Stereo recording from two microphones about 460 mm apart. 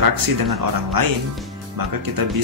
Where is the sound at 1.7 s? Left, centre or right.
Right.